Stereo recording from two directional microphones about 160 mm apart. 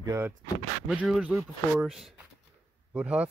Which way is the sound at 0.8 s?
5° right (ahead or behind).